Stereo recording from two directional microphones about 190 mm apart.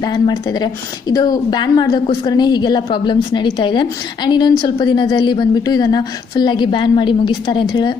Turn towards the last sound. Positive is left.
turn(degrees=25)  # may be behind; listen again after turning